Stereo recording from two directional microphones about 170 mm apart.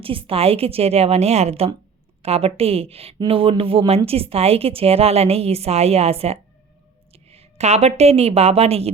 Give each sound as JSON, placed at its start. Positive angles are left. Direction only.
{"t": 0.0, "sound": "a woman's voice", "side_deg": -30}